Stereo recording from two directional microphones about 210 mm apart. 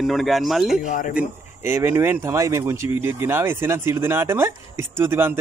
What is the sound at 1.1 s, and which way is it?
Speech, 10° right (ahead or behind).